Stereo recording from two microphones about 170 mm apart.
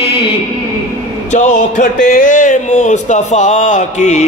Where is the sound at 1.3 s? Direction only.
45° left (ahead or behind).